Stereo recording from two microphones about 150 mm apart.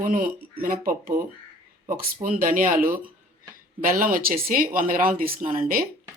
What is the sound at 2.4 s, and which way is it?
Speech, 65° right (ahead or behind).